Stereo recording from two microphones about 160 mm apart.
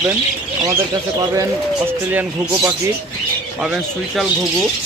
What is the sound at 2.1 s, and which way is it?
Speech, 10° right (ahead or behind).